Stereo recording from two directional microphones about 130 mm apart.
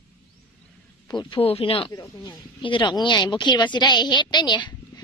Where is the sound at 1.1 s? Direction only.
35° left (ahead or behind).